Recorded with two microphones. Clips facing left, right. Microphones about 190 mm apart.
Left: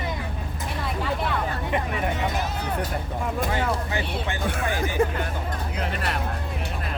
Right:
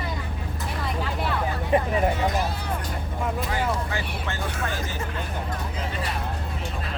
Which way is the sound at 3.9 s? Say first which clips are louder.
Left 3 dB; 15° left (ahead or behind).